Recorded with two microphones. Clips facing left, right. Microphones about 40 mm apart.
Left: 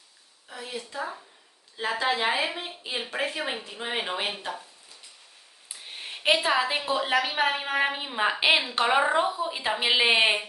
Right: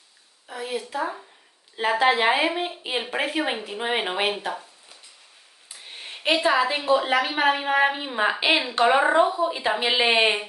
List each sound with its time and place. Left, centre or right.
0.5 s a woman's voice: centre
5.7 s a sound: centre
6.8 s a woman's voice: centre